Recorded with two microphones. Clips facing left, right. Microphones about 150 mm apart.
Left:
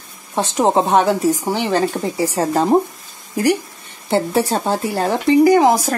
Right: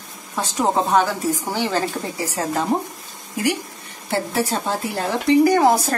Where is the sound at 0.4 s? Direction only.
20° left (ahead or behind).